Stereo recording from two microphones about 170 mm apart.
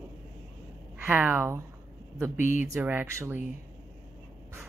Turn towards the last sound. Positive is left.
turn(degrees=-15)  # may be behind; listen again after turning